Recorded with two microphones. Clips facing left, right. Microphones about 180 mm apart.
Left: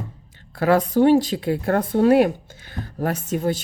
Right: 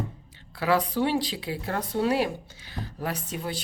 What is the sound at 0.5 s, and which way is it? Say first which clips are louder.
Speech: left 7 dB; 50° left (ahead or behind).